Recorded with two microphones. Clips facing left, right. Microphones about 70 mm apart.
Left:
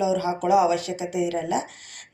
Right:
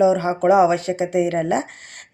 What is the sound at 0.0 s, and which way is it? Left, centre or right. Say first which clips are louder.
A woman's voice: right 7 dB; right.